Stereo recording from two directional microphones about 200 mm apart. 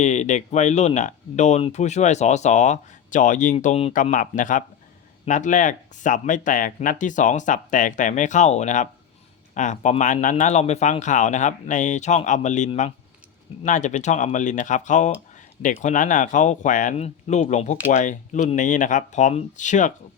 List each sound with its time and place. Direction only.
0.0 s speech: 35° left (ahead or behind)